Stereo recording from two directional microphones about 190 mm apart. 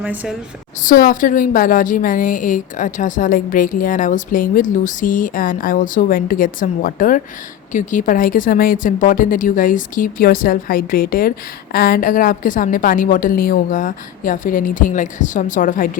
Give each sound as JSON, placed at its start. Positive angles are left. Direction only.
{"t": 0.0, "sound": "a woman's voice", "side_deg": -10}
{"t": 0.9, "sound": "speech", "side_deg": 45}